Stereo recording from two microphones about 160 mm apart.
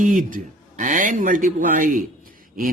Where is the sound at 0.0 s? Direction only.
55° right (ahead or behind).